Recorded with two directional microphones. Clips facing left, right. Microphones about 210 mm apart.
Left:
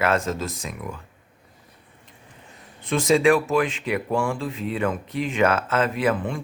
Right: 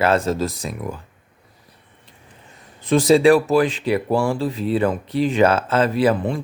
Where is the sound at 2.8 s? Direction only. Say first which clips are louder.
Right 5 dB; 35° right (ahead or behind).